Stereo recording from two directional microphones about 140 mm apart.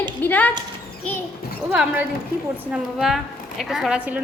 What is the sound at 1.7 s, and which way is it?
Speech, 10° right (ahead or behind).